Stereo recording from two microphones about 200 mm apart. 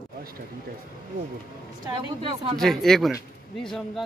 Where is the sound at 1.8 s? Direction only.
20° right (ahead or behind).